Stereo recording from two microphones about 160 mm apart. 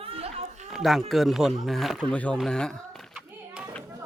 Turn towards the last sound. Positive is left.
turn(degrees=0)  # may be behind; listen again after turning